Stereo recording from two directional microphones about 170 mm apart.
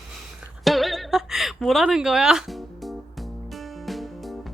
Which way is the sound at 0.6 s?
Centre (ahead or behind).